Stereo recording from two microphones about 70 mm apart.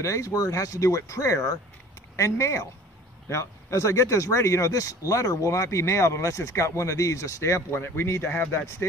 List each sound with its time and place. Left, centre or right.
0.0 s speech: left